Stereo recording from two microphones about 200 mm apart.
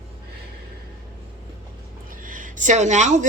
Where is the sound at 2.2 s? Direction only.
40° right (ahead or behind).